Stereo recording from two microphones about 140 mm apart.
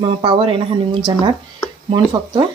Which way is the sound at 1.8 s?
35° right (ahead or behind).